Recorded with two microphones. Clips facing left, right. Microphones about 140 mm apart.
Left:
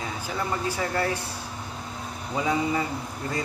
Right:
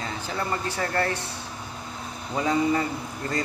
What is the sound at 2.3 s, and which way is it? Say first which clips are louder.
Speech: right 2 dB; 10° left (ahead or behind).